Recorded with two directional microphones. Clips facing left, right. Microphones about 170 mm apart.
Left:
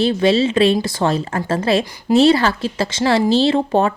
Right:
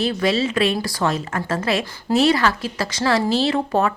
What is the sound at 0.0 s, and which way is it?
Speech, 30° left (ahead or behind).